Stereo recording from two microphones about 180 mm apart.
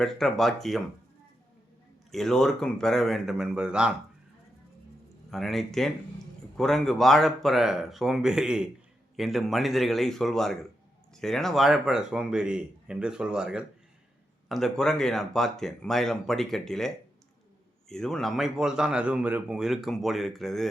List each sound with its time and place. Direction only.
0.0 s a man's voice: centre (ahead or behind)
2.1 s a man's voice: centre (ahead or behind)
5.3 s a man's voice: centre (ahead or behind)